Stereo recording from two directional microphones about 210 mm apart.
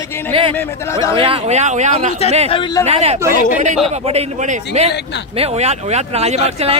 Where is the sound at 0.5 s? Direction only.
15° left (ahead or behind).